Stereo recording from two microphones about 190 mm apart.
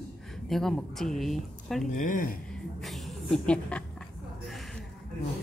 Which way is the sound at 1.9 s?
45° left (ahead or behind).